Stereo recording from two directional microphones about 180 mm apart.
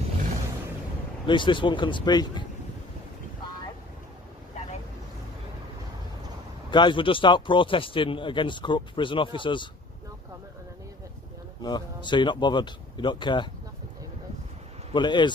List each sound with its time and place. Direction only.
1.2 s a man's voice: 25° left (ahead or behind)
6.7 s a man's voice: 25° left (ahead or behind)
11.6 s a man's voice: 25° left (ahead or behind)
15.0 s a man's voice: 25° left (ahead or behind)